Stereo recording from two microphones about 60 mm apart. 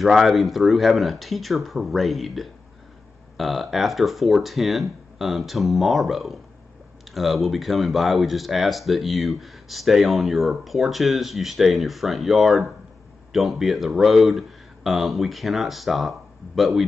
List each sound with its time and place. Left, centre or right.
0.0 s speech: centre